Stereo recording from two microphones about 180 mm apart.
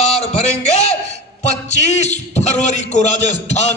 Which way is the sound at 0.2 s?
40° left (ahead or behind).